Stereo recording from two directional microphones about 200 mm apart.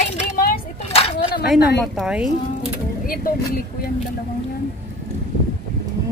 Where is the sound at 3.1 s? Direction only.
45° left (ahead or behind).